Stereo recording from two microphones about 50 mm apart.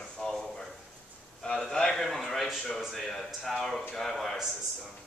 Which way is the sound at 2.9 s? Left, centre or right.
Centre.